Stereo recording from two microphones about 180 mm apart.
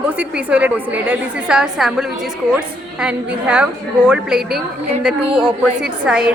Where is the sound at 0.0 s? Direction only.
5° right (ahead or behind).